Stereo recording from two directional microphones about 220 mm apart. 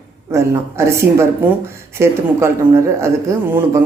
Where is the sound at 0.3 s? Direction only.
15° right (ahead or behind).